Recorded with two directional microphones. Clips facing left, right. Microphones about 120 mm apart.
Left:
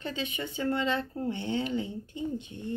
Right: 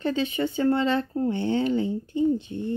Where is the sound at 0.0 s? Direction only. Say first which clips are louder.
Right 10 dB; 35° right (ahead or behind).